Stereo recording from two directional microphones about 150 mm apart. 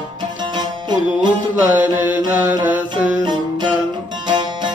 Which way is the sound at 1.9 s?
10° right (ahead or behind).